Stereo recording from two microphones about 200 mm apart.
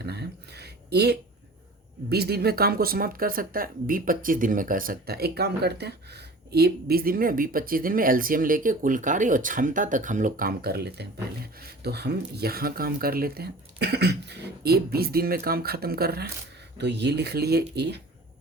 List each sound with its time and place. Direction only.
0.0 s speech: 55° right (ahead or behind)